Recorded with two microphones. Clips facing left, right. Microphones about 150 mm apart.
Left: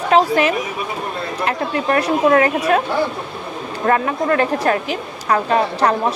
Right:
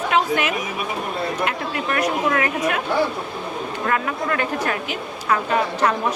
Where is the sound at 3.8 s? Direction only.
40° left (ahead or behind).